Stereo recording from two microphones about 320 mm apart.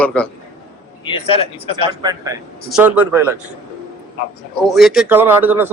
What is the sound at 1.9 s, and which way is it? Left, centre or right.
A man's voice, centre.